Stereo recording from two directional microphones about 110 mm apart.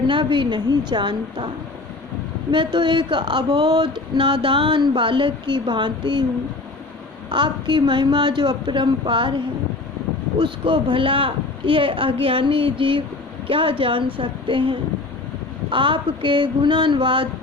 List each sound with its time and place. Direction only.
0.1 s speech: 50° right (ahead or behind)
2.7 s speech: 45° right (ahead or behind)
7.3 s speech: 45° right (ahead or behind)